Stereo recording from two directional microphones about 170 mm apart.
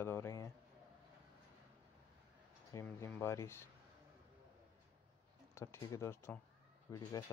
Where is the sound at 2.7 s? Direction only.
15° left (ahead or behind).